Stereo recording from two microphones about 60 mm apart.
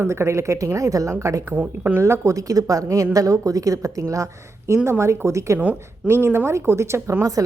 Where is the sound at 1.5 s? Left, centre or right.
Right.